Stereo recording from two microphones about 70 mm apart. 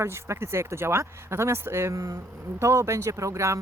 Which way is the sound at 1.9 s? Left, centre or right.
Right.